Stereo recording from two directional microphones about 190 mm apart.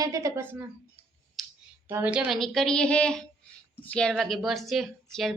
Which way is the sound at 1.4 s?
Centre (ahead or behind).